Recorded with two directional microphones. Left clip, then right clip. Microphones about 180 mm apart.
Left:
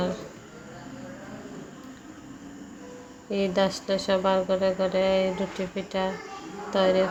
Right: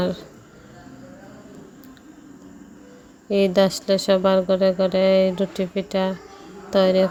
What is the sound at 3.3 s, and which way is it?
Speech, 40° right (ahead or behind).